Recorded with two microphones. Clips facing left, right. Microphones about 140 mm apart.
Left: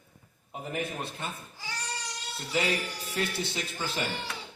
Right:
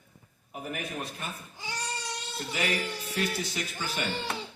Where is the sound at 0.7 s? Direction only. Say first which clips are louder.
Left 3 dB; 25° left (ahead or behind).